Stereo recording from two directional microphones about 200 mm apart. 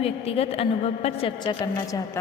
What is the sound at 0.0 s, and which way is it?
A woman's voice, 30° left (ahead or behind).